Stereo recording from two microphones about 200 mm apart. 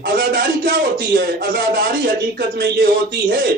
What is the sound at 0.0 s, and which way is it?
A man's voice, 50° right (ahead or behind).